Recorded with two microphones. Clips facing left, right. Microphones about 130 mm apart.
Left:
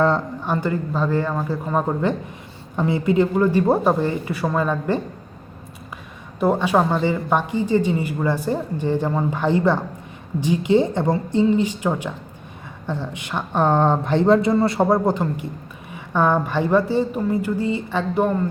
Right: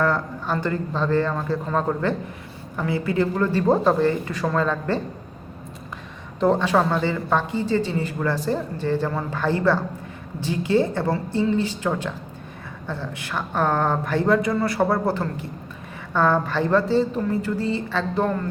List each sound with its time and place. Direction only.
0.4 s a woman's voice: 15° left (ahead or behind)
6.4 s a woman's voice: 10° left (ahead or behind)